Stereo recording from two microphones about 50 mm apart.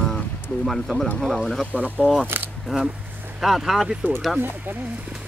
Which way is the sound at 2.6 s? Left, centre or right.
Centre.